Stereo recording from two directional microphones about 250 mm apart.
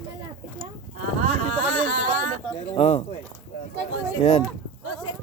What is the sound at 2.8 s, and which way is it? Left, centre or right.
Speech, left.